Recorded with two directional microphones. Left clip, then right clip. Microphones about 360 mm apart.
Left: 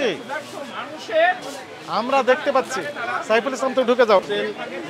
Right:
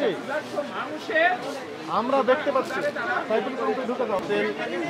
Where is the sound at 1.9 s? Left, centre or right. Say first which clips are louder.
Left 3 dB; left.